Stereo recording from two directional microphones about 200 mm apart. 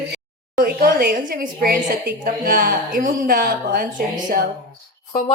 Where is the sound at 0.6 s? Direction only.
50° right (ahead or behind).